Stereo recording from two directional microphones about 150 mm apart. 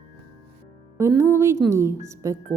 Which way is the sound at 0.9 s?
15° right (ahead or behind).